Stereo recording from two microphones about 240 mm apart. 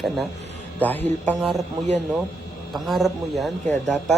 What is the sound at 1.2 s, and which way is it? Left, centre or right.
A man's voice, centre.